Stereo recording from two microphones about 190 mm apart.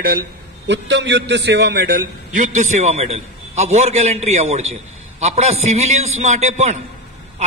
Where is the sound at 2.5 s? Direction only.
40° right (ahead or behind).